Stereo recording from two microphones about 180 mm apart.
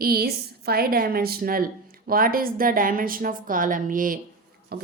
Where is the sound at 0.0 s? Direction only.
55° right (ahead or behind).